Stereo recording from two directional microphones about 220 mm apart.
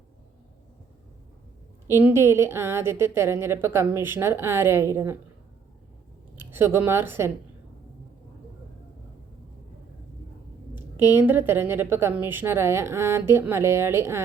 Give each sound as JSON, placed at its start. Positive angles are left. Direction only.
{"t": 1.9, "sound": "a woman's voice", "side_deg": -10}
{"t": 6.3, "sound": "speech", "side_deg": -10}
{"t": 10.8, "sound": "a woman's voice", "side_deg": -10}